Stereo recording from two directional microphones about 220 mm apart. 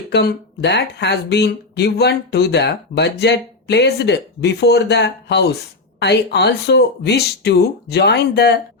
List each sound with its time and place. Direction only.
0.1 s speech: 50° left (ahead or behind)